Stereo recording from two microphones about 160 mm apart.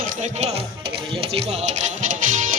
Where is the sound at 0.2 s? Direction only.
45° right (ahead or behind).